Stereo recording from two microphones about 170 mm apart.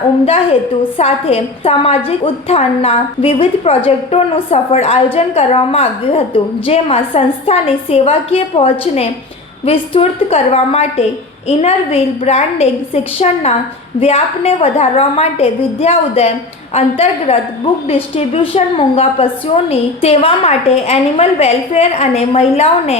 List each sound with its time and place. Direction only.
0.9 s a woman's voice: 40° left (ahead or behind)